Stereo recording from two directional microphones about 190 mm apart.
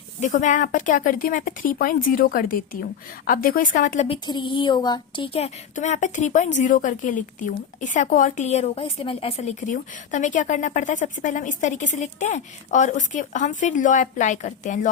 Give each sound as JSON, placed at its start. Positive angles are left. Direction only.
{"t": 0.2, "sound": "a woman's voice", "side_deg": 40}
{"t": 4.1, "sound": "a woman's voice", "side_deg": 25}